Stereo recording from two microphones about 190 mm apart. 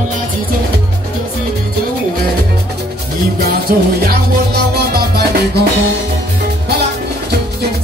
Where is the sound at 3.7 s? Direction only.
55° right (ahead or behind).